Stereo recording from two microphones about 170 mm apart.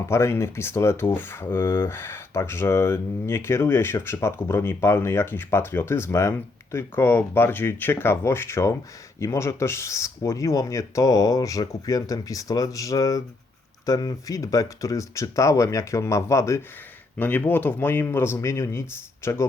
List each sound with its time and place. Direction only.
0.1 s speech: 15° left (ahead or behind)